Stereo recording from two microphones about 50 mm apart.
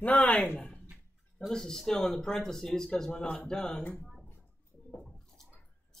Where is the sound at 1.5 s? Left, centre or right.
Centre.